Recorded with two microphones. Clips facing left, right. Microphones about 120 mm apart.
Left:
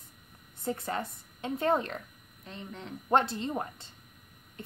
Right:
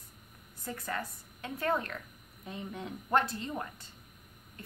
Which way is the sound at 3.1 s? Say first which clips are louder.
Left 3 dB; 25° left (ahead or behind).